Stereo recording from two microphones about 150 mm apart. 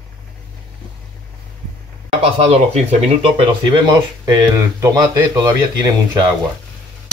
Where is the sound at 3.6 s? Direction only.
30° right (ahead or behind).